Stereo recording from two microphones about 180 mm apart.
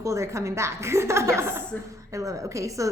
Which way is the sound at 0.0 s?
15° right (ahead or behind).